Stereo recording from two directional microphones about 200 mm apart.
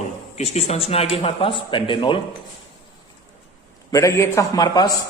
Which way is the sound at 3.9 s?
15° left (ahead or behind).